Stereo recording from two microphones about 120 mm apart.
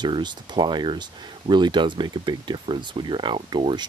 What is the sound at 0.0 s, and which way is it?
Speech, 40° right (ahead or behind).